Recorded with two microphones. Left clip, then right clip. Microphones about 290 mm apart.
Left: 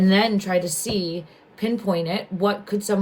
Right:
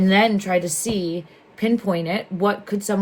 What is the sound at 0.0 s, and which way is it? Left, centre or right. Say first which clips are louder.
A woman's voice: right 2 dB; right.